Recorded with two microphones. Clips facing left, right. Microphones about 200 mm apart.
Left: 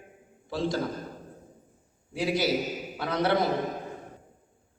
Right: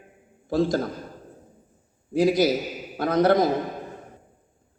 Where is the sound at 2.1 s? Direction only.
40° right (ahead or behind).